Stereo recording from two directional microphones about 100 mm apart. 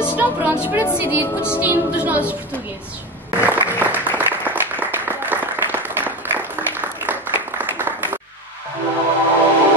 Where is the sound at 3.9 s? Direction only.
20° right (ahead or behind).